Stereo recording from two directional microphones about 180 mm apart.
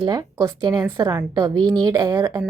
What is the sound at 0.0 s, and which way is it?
A woman's voice, 20° right (ahead or behind).